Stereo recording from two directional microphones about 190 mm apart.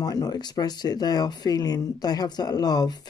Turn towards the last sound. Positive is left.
turn(degrees=20)  # may be behind; listen again after turning